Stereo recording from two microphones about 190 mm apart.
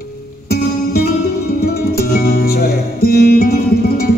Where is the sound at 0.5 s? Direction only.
55° left (ahead or behind).